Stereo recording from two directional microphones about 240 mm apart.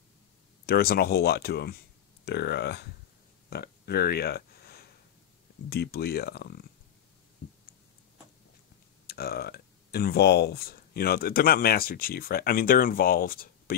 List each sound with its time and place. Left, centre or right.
0.7 s speech: left
3.4 s a sound: left
5.7 s speech: left
9.0 s speech: left